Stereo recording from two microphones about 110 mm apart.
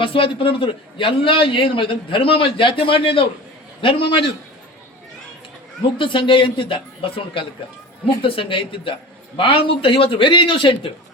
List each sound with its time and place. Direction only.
0.0 s a man's voice: 55° left (ahead or behind)
6.0 s a man's voice: 50° left (ahead or behind)